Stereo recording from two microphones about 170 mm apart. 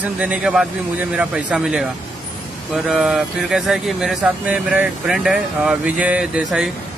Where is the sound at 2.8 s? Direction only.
5° right (ahead or behind).